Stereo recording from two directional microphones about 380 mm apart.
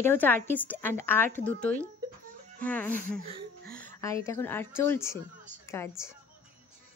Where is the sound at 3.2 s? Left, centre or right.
Centre.